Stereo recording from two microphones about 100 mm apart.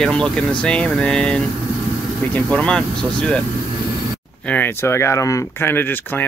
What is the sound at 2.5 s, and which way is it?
Speech, 10° left (ahead or behind).